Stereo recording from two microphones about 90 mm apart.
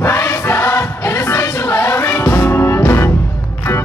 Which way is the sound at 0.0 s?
25° left (ahead or behind).